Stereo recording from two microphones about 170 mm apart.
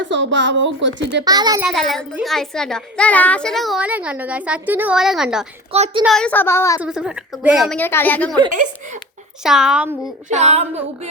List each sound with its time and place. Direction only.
0.0 s a woman's voice: 90° right
1.2 s a child's voice: 25° right (ahead or behind)
1.6 s a child's voice: centre (ahead or behind)
5.7 s speech: 40° right (ahead or behind)
6.0 s a child's voice: centre (ahead or behind); by 6.8 s 15° left (ahead or behind)
6.8 s a child's voice: 5° right (ahead or behind)
7.8 s a child's voice: 10° left (ahead or behind)
9.4 s a child's voice: centre (ahead or behind)
10.2 s speech: 40° right (ahead or behind)